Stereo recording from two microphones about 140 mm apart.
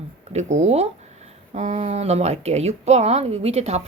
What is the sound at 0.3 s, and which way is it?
A woman's voice, 55° right (ahead or behind).